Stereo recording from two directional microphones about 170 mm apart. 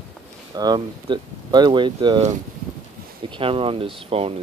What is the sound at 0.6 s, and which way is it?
Speech, 25° right (ahead or behind).